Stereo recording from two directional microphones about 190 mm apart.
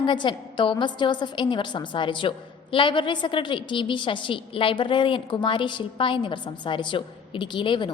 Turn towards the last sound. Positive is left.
turn(degrees=25)  # may be behind; listen again after turning